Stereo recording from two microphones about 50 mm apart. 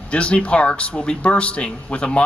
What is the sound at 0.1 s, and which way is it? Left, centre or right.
Speech, left.